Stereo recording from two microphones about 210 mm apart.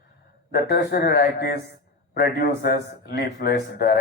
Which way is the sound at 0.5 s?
50° left (ahead or behind).